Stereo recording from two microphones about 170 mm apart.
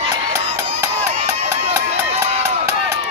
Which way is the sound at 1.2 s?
40° right (ahead or behind).